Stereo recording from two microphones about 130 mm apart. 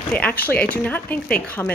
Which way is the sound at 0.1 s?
10° left (ahead or behind).